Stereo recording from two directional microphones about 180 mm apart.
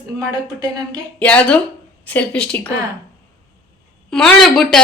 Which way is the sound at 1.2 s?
10° left (ahead or behind).